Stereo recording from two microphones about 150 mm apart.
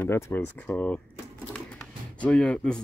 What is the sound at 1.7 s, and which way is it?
Music, 10° left (ahead or behind).